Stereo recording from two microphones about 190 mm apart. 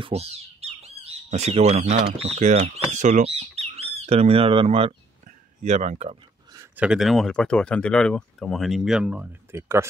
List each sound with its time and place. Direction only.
0.0 s speech: 30° right (ahead or behind)
6.8 s speech: centre (ahead or behind)